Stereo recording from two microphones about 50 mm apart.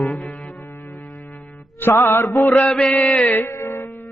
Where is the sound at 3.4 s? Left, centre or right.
Left.